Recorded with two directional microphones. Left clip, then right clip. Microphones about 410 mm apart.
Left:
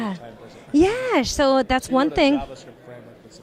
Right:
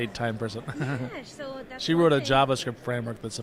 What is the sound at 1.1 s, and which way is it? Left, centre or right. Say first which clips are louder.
Speech: left 19 dB; left.